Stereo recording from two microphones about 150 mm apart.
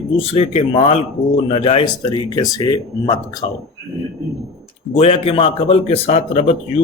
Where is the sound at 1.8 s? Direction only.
30° left (ahead or behind).